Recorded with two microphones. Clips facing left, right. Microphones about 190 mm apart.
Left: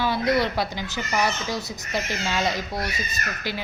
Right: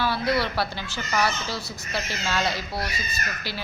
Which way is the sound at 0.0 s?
20° left (ahead or behind).